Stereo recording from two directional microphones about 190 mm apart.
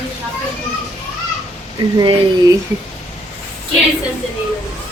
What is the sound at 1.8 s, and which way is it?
Speech, 20° right (ahead or behind).